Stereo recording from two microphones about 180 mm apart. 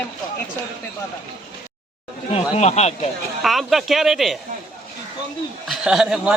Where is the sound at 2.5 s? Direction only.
40° left (ahead or behind).